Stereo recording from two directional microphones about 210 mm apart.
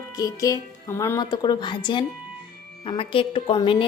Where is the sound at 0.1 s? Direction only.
15° left (ahead or behind).